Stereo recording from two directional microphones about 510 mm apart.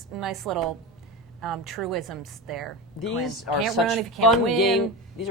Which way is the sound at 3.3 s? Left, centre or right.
Left.